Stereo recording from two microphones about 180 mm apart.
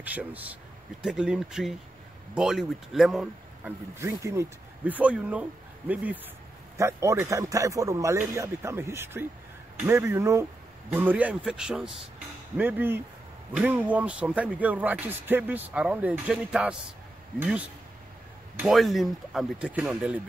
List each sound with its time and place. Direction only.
0.0 s speech: 10° right (ahead or behind)
3.9 s speech: 15° right (ahead or behind)